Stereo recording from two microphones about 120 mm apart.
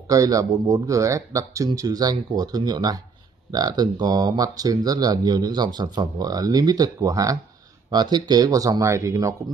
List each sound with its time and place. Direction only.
0.1 s speech: 30° right (ahead or behind)